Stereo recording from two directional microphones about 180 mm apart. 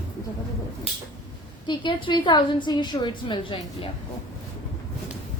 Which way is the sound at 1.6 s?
25° left (ahead or behind).